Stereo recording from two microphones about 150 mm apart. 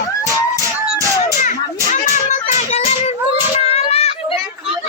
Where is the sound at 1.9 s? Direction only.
55° left (ahead or behind); by 4.4 s 40° left (ahead or behind).